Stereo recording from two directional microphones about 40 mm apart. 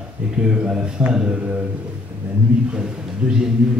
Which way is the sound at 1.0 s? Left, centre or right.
Right.